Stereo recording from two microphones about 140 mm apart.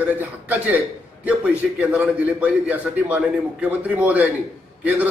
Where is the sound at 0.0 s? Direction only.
10° right (ahead or behind).